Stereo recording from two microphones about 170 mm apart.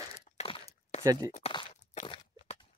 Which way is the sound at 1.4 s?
35° left (ahead or behind).